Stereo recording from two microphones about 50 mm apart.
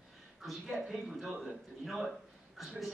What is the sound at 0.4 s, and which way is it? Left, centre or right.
A man's voice, centre.